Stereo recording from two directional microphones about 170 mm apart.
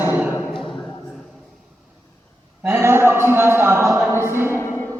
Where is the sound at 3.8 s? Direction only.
5° right (ahead or behind).